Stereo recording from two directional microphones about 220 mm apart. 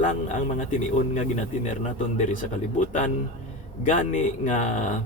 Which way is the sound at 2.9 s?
35° left (ahead or behind).